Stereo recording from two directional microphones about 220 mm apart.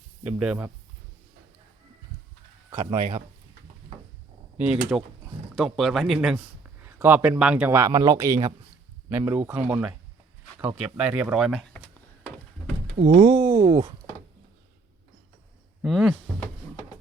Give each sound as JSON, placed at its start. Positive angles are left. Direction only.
{"t": 0.3, "sound": "speech", "side_deg": -5}
{"t": 2.6, "sound": "speech", "side_deg": -15}
{"t": 4.9, "sound": "a man's voice", "side_deg": -5}
{"t": 13.0, "sound": "speech", "side_deg": -30}
{"t": 13.3, "sound": "a sound", "side_deg": -15}
{"t": 13.6, "sound": "speech", "side_deg": -20}
{"t": 15.8, "sound": "speech", "side_deg": 0}